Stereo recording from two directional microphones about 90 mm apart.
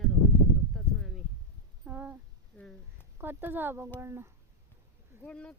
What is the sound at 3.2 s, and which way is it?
Speech, 20° right (ahead or behind).